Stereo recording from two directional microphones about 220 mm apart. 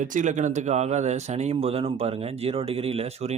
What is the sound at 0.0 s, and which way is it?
Speech, 35° right (ahead or behind).